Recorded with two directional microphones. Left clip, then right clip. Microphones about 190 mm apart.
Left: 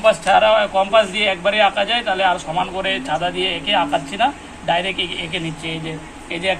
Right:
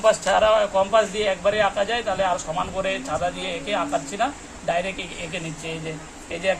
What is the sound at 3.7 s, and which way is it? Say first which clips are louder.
Speech: left 5 dB; 45° right (ahead or behind).